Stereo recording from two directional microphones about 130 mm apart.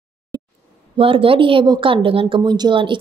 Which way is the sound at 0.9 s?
45° right (ahead or behind).